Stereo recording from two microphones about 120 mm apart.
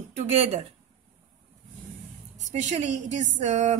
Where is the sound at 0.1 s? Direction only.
60° right (ahead or behind).